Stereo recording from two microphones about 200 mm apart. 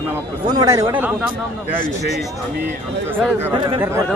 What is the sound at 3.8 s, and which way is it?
Speech, 15° right (ahead or behind).